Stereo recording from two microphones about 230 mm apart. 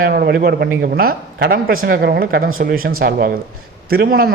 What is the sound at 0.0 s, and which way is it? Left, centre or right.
A man's voice, right.